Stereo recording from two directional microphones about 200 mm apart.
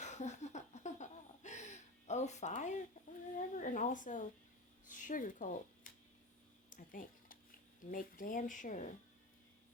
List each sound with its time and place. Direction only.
0.0 s laughter: 35° left (ahead or behind)
3.3 s speech: 40° left (ahead or behind)
6.7 s a sound: 45° left (ahead or behind)
7.9 s speech: 45° left (ahead or behind)